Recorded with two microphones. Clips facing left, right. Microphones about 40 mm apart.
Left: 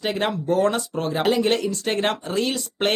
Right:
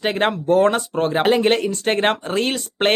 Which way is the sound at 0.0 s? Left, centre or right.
Right.